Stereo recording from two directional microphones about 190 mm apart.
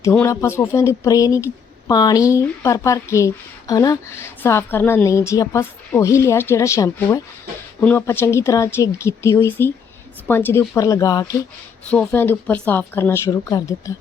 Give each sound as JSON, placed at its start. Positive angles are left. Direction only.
{"t": 0.0, "sound": "speech", "side_deg": 10}